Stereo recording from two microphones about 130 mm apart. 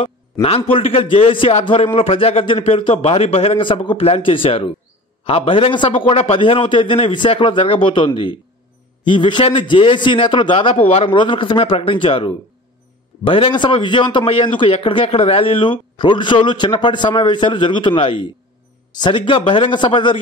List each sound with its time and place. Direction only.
0.0 s a man's voice: 50° left (ahead or behind)